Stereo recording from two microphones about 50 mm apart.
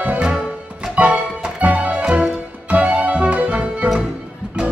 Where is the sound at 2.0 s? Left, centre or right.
Centre.